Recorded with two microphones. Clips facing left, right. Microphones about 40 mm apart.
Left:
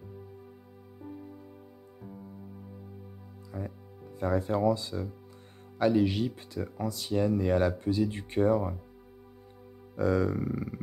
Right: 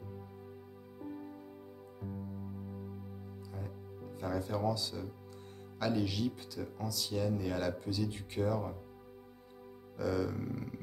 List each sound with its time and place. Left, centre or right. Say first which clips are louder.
3.5 s speech: left 8 dB; left
9.9 s speech: left 7 dB; left
10.5 s a sound: left 6 dB; left